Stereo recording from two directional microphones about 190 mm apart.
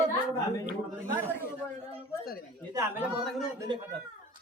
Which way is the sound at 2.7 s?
15° right (ahead or behind).